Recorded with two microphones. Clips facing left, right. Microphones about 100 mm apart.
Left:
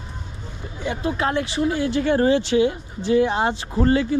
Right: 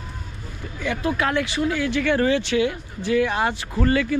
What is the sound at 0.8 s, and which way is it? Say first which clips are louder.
Speech: even; 25° left (ahead or behind).